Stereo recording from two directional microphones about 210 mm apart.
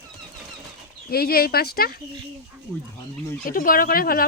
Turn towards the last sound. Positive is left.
turn(degrees=45)  # may be behind; listen again after turning